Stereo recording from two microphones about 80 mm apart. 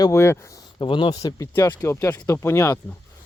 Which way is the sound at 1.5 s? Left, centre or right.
Left.